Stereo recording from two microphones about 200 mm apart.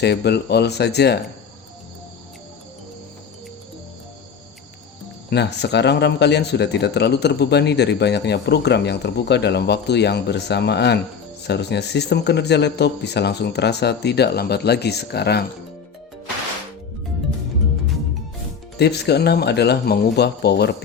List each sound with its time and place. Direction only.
0.0 s speech: 55° left (ahead or behind)
5.3 s speech: 55° left (ahead or behind)
18.8 s speech: 55° left (ahead or behind)